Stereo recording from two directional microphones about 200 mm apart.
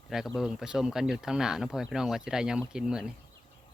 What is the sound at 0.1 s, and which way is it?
Speech, centre (ahead or behind).